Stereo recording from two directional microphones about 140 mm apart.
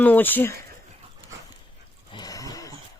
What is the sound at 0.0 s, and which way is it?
Speech, 15° left (ahead or behind).